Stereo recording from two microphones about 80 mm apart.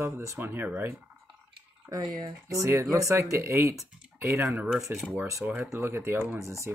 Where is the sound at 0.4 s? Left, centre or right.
Right.